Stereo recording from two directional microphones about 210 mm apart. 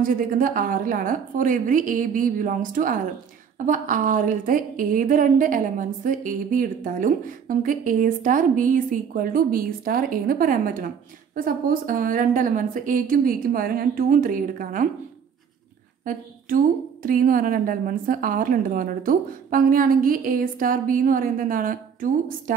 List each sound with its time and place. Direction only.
0.0 s a woman's voice: 40° right (ahead or behind)
16.0 s a woman's voice: 40° right (ahead or behind)